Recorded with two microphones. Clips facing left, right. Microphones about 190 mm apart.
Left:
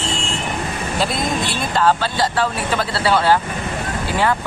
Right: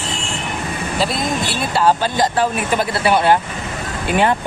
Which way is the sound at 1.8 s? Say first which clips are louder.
Right 2 dB; 15° right (ahead or behind).